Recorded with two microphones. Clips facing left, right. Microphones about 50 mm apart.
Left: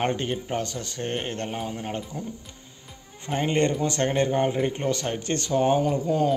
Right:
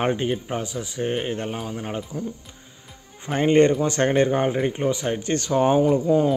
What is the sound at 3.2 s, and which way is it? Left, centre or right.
Speech, centre.